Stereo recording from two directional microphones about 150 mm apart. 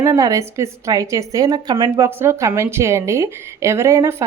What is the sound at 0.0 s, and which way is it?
A woman's voice, 20° right (ahead or behind).